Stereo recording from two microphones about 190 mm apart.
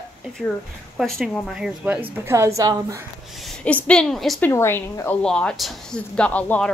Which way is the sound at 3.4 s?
5° left (ahead or behind).